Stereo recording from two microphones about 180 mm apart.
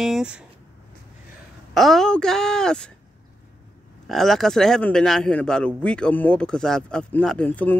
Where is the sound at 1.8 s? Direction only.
Centre (ahead or behind).